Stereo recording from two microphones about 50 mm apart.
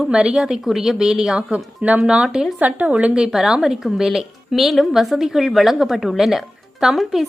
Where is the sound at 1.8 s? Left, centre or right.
Right.